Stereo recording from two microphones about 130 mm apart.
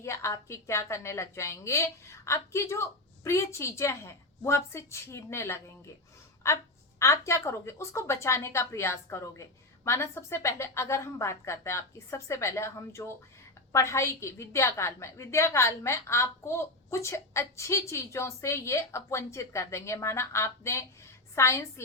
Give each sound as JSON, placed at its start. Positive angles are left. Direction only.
{"t": 0.0, "sound": "a woman's voice", "side_deg": 20}